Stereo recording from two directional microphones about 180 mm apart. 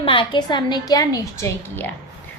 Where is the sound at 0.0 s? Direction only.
30° left (ahead or behind).